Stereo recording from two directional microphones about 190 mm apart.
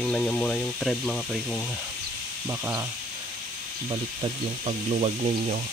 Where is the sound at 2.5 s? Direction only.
15° right (ahead or behind).